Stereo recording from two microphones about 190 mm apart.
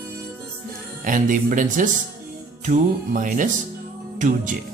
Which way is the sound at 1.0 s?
45° right (ahead or behind).